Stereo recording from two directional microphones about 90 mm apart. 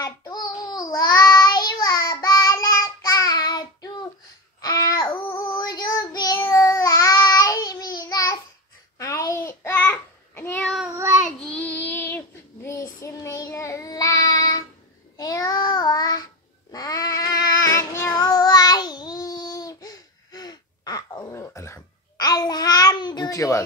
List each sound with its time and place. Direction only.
0.2 s child singing: 50° left (ahead or behind); by 2.9 s 35° left (ahead or behind)
3.1 s child singing: 45° left (ahead or behind)
4.6 s babbling: 45° left (ahead or behind)
5.4 s child singing: 55° left (ahead or behind); by 8.4 s 40° left (ahead or behind)
8.9 s babbling: 35° left (ahead or behind)
11.2 s child singing: 5° left (ahead or behind)
11.5 s child singing: 20° left (ahead or behind)
12.6 s child singing: 35° left (ahead or behind)
18.3 s child singing: 50° left (ahead or behind)
22.2 s babbling: 50° left (ahead or behind)